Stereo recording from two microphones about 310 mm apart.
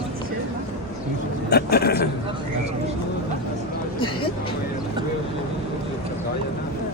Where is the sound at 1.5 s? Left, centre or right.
Left.